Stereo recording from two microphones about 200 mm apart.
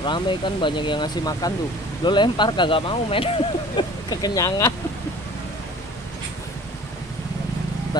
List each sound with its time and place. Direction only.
0.0 s speech: 25° left (ahead or behind)